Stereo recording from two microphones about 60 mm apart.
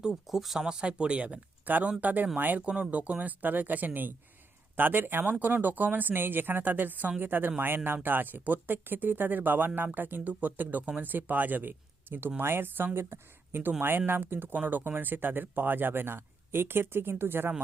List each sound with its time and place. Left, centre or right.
0.1 s speech: centre
1.6 s speech: right